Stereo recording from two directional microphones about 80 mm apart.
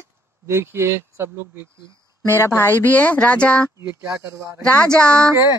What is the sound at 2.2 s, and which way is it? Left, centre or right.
Speech, left.